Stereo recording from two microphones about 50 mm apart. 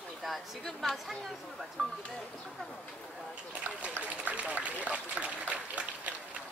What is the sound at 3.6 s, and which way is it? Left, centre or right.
A man's voice, right.